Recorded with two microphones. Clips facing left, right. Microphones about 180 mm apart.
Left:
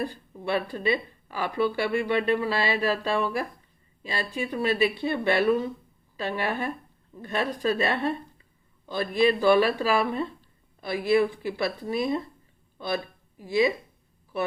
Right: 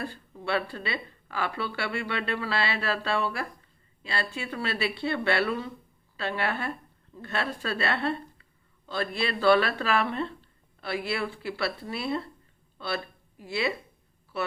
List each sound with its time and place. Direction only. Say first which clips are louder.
0.0 s speech: left 4 dB; 15° left (ahead or behind)
13.4 s speech: left 6 dB; 15° left (ahead or behind)